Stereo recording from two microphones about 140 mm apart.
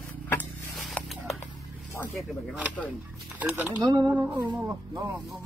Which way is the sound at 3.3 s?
10° right (ahead or behind).